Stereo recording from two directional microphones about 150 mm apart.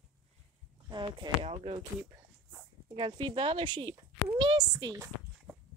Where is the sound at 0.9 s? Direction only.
30° right (ahead or behind).